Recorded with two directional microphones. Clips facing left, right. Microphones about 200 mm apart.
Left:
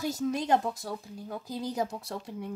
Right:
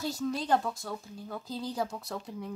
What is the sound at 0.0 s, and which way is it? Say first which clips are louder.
Speech: left 2 dB; 20° left (ahead or behind).